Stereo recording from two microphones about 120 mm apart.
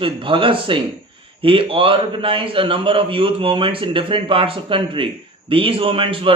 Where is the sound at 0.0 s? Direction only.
45° right (ahead or behind).